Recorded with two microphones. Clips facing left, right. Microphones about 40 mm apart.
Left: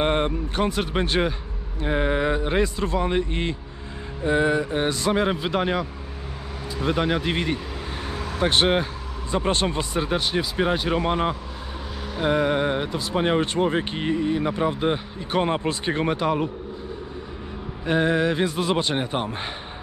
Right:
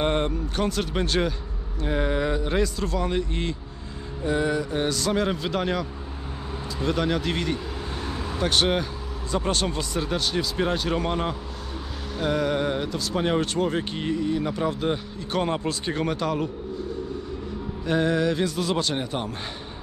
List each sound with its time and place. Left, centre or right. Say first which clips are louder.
0.0 s speech: left 2 dB; left
17.8 s speech: left 2 dB; left